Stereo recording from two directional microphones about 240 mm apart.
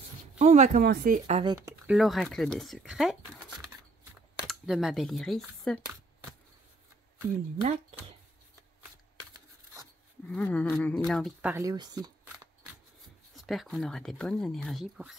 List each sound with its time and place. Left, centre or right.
0.4 s speech: right
1.5 s speech: centre
2.0 s speech: centre
10.2 s speech: centre
11.5 s speech: centre
13.3 s speech: centre